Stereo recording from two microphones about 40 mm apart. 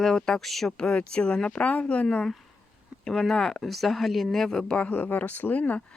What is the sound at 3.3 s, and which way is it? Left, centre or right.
Speech, centre.